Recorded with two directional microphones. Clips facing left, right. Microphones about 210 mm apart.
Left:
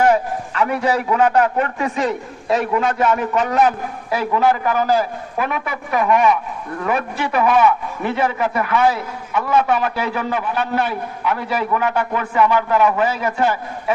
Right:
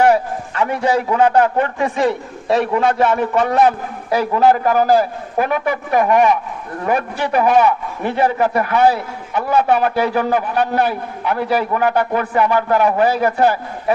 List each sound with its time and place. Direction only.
0.6 s a man's voice: 30° right (ahead or behind)